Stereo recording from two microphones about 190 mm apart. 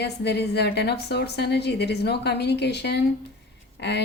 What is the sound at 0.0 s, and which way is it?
Speech, 60° left (ahead or behind).